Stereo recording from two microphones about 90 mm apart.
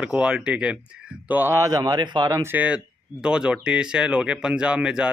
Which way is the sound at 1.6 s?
45° right (ahead or behind).